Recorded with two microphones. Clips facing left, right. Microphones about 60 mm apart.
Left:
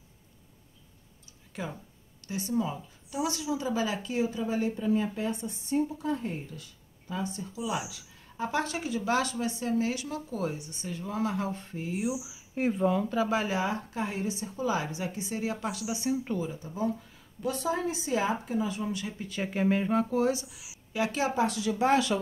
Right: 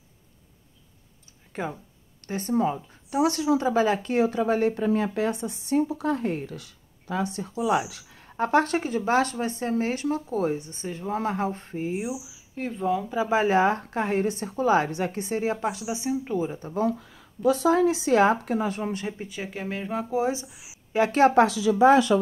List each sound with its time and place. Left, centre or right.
1.5 s speech: right
12.5 s speech: centre
13.1 s speech: right
13.5 s speech: right
16.0 s speech: centre
16.5 s speech: right
17.6 s speech: right
19.4 s speech: centre
20.0 s speech: centre
20.2 s speech: right
20.9 s speech: right